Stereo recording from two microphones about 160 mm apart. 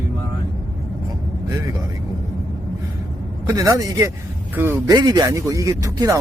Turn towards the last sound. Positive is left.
turn(degrees=-20)  # may be behind; listen again after turning